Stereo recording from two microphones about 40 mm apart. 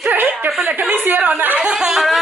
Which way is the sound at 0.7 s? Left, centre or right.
Right.